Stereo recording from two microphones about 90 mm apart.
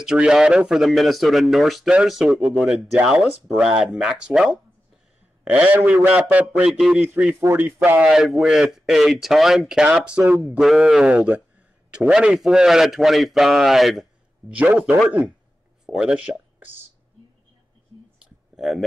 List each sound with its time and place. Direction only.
0.0 s a man's voice: 5° right (ahead or behind); by 8.0 s 25° right (ahead or behind)
8.0 s a man's voice: centre (ahead or behind)
14.5 s speech: 15° right (ahead or behind)
18.6 s a man's voice: centre (ahead or behind)